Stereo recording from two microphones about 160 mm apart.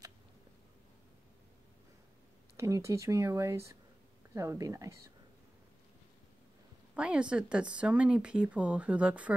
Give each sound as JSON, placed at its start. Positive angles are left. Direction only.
{"t": 2.5, "sound": "speech", "side_deg": -20}
{"t": 7.0, "sound": "speech", "side_deg": -5}